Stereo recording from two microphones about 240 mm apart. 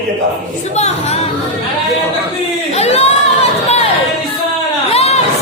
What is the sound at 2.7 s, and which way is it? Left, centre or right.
Chatter, left.